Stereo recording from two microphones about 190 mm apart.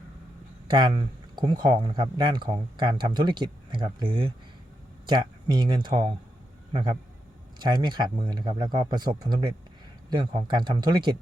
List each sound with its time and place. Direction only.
0.7 s speech: 25° right (ahead or behind)
7.6 s speech: 25° right (ahead or behind)